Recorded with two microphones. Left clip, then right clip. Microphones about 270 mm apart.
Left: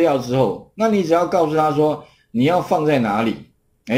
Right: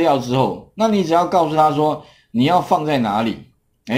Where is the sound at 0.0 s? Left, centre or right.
Right.